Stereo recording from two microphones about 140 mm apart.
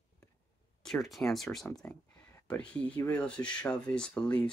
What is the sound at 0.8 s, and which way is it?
Speech, 5° left (ahead or behind).